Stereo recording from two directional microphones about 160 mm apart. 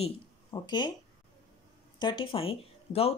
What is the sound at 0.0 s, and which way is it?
Speech, 30° left (ahead or behind).